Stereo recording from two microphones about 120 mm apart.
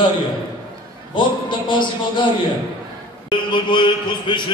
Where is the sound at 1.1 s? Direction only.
45° left (ahead or behind).